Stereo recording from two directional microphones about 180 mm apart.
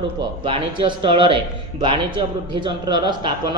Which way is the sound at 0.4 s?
25° right (ahead or behind).